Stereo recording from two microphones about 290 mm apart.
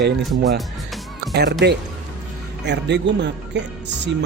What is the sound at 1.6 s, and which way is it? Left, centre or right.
Speech, right.